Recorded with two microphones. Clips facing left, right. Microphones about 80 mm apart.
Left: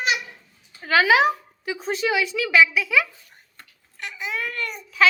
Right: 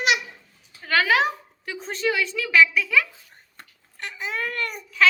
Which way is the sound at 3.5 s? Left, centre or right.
Right.